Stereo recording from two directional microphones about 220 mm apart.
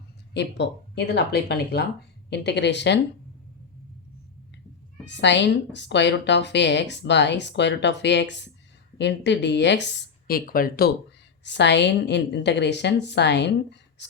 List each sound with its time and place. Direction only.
0.3 s a woman's voice: 50° left (ahead or behind)
5.0 s a woman's voice: 55° left (ahead or behind)
11.4 s a woman's voice: 50° left (ahead or behind)